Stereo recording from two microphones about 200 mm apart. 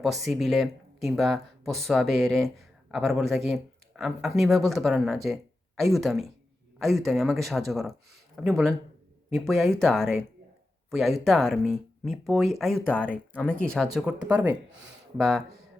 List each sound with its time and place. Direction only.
0.0 s speech: centre (ahead or behind)